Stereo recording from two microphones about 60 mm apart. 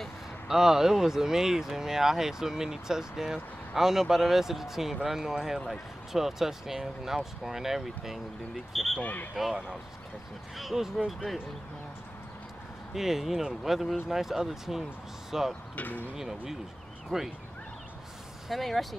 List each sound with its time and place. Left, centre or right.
0.5 s speech: centre
9.0 s speech: left
9.3 s speech: centre
12.9 s speech: centre
15.7 s speech: left
16.2 s speech: centre
18.5 s speech: centre